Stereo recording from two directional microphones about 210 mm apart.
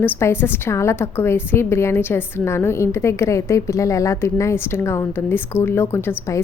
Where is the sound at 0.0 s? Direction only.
10° left (ahead or behind).